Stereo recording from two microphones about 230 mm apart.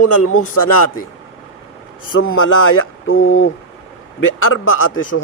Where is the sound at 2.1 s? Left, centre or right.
Left.